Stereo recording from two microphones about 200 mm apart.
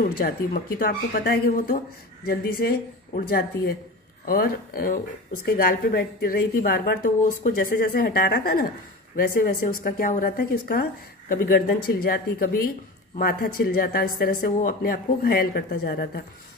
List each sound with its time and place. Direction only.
0.2 s a woman's voice: 45° left (ahead or behind)